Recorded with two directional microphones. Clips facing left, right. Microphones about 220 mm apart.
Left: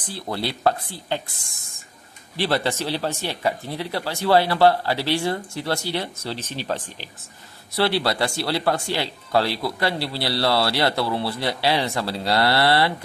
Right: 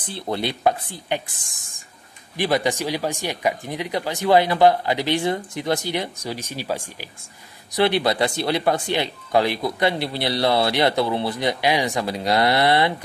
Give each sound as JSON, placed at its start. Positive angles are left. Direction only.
{"t": 0.1, "sound": "speech", "side_deg": -20}
{"t": 2.3, "sound": "speech", "side_deg": -15}